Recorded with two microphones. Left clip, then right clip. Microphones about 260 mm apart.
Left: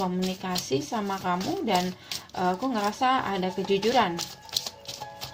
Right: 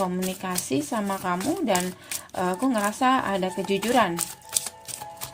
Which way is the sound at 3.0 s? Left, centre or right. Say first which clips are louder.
Right 2 dB; right.